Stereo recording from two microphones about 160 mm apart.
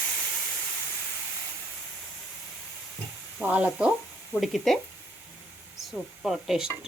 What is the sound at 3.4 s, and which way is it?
Speech, 10° right (ahead or behind).